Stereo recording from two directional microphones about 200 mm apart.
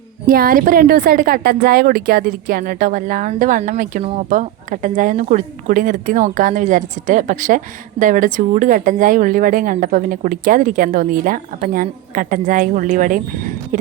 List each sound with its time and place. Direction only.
0.3 s speech: 45° right (ahead or behind)